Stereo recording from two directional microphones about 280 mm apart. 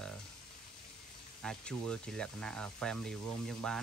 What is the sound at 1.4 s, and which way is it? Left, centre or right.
Speech, centre.